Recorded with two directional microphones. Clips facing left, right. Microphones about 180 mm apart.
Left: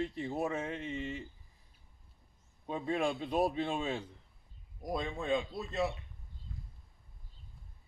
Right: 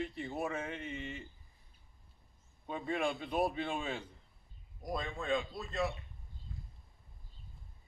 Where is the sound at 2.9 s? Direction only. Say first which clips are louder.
Left 2 dB; 30° left (ahead or behind).